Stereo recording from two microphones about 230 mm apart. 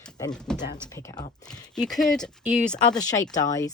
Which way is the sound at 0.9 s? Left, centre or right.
Centre.